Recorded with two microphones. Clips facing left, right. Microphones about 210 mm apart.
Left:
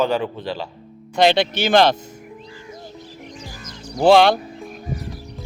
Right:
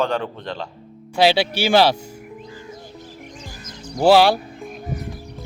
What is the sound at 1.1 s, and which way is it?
Speech, 5° right (ahead or behind).